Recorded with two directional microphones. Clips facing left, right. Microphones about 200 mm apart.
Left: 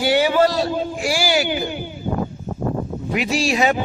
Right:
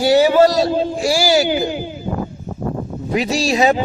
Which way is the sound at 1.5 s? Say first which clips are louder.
Right 5 dB; 90° right.